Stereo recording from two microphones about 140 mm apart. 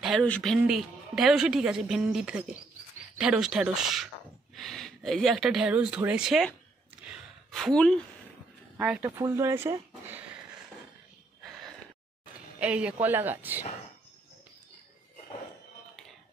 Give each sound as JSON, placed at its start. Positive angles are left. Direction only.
{"t": 0.0, "sound": "a woman's voice", "side_deg": 5}
{"t": 7.1, "sound": "a sound", "side_deg": 0}
{"t": 8.7, "sound": "speech", "side_deg": -10}
{"t": 9.0, "sound": "speech", "side_deg": -20}
{"t": 12.5, "sound": "speech", "side_deg": -10}